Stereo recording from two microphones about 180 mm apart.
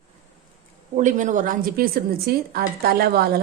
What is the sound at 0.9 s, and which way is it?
A woman's voice, 45° right (ahead or behind).